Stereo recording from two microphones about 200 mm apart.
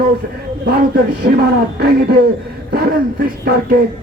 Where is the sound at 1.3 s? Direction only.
50° right (ahead or behind).